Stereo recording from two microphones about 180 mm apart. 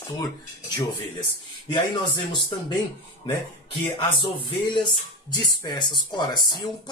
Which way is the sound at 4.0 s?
30° left (ahead or behind).